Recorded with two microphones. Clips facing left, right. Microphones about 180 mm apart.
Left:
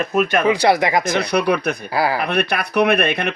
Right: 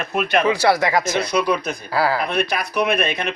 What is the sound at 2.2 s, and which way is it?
Speech, 60° left (ahead or behind).